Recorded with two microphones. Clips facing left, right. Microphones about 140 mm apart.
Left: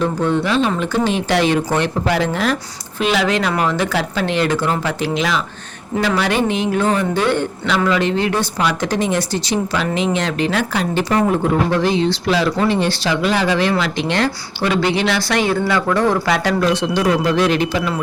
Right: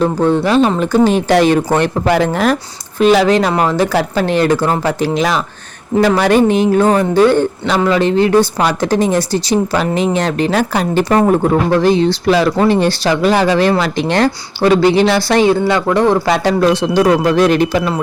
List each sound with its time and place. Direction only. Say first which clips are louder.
0.0 s speech: right 5 dB; 35° right (ahead or behind)
15.4 s speech: right 5 dB; 25° right (ahead or behind)
16.6 s speech: right 7 dB; 45° right (ahead or behind)